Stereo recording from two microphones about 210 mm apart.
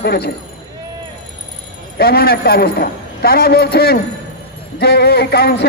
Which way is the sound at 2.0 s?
50° left (ahead or behind).